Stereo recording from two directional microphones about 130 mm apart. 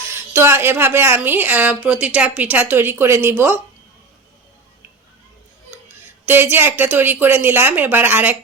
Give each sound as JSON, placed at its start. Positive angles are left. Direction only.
{"t": 0.1, "sound": "a woman's voice", "side_deg": -20}
{"t": 6.2, "sound": "a woman's voice", "side_deg": -15}